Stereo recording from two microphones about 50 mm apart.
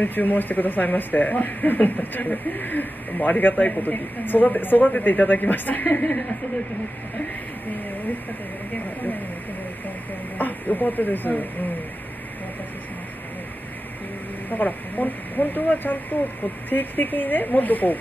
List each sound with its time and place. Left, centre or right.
0.0 s speech: left
10.3 s speech: left
14.5 s speech: left